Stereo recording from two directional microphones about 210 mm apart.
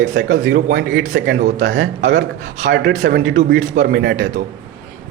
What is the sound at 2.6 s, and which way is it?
A man's voice, 50° right (ahead or behind).